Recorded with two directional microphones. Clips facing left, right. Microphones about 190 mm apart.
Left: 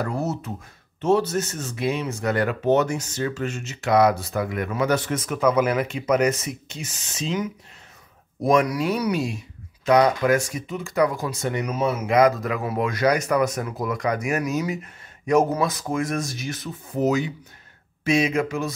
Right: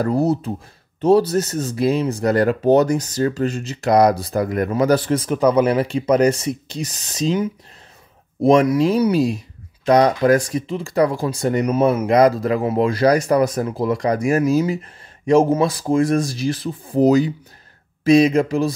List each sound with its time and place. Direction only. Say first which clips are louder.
0.0 s speech: right 8 dB; 35° right (ahead or behind)
11.6 s speech: right 8 dB; 50° right (ahead or behind)
12.1 s speech: right 1 dB; 35° right (ahead or behind)